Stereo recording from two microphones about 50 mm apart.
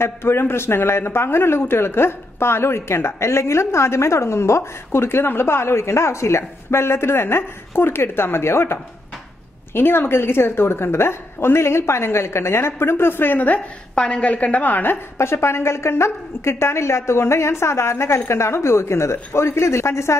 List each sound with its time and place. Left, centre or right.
0.0 s a man's voice: left
9.8 s a man's voice: left
13.9 s a woman's voice: centre; by 15.0 s left
15.1 s a man's voice: left